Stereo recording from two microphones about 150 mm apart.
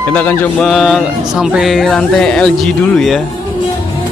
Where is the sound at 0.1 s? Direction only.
10° left (ahead or behind).